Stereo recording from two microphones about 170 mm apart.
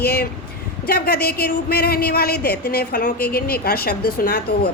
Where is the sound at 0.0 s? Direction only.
65° left (ahead or behind).